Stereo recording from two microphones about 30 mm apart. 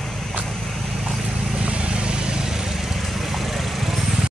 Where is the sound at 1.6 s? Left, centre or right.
Right.